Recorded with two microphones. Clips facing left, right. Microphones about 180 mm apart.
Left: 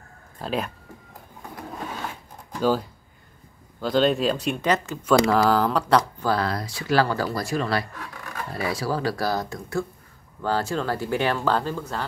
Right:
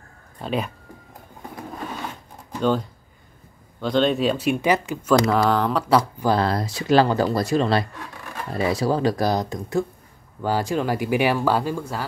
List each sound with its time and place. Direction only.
0.4 s speech: centre (ahead or behind)
2.6 s speech: 5° left (ahead or behind)
6.2 s speech: 25° right (ahead or behind); by 12.1 s 10° right (ahead or behind)